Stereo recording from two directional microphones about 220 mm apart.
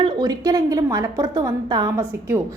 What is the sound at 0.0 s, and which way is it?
A woman's voice, 20° right (ahead or behind).